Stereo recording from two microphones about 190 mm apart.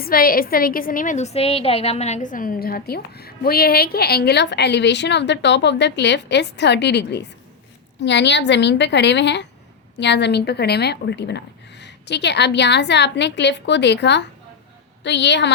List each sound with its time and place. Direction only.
0.0 s a woman's voice: 50° left (ahead or behind); by 15.5 s 65° left (ahead or behind)